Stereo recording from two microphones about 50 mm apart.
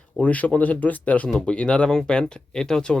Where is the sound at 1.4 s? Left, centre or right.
Centre.